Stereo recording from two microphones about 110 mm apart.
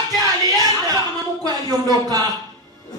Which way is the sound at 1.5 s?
35° right (ahead or behind).